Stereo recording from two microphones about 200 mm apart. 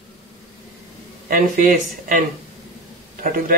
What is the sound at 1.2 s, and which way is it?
A man's voice, 45° right (ahead or behind).